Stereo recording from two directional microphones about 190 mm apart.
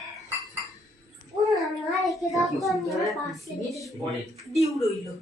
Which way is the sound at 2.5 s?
Centre (ahead or behind).